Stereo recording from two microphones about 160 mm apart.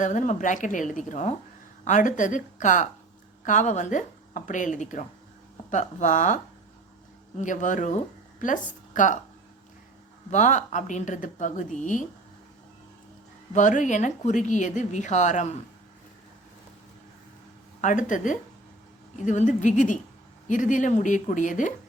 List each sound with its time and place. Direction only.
0.0 s speech: 50° left (ahead or behind)
10.2 s speech: 50° left (ahead or behind)
13.5 s speech: 50° left (ahead or behind)
17.7 s speech: 55° left (ahead or behind)